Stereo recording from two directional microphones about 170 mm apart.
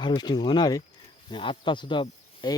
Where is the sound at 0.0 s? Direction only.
25° left (ahead or behind).